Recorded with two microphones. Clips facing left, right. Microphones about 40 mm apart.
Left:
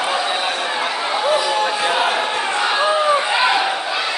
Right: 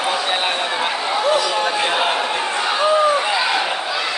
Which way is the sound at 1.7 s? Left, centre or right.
Centre.